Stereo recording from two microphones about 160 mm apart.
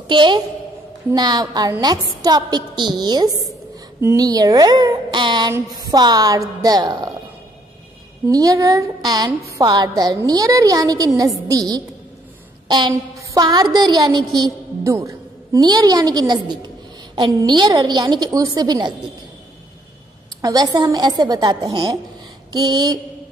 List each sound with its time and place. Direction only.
0.1 s a woman's voice: 30° right (ahead or behind)
8.3 s a woman's voice: 20° right (ahead or behind)
12.6 s a sound: 25° right (ahead or behind)
13.7 s a woman's voice: 25° right (ahead or behind)
20.4 s a woman's voice: 20° right (ahead or behind)